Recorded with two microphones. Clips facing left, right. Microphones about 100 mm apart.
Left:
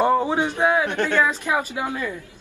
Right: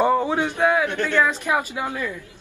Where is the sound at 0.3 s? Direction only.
15° left (ahead or behind).